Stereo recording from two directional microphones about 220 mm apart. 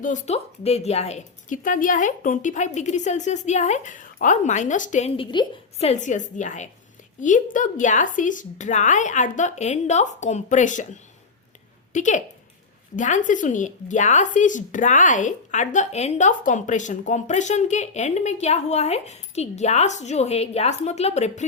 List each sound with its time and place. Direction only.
0.0 s speech: 35° left (ahead or behind)
11.9 s speech: 35° left (ahead or behind)